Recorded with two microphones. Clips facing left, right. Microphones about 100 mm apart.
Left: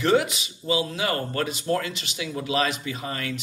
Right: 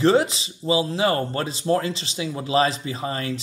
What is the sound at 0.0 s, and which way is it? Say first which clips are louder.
Speech: right 3 dB; 30° right (ahead or behind).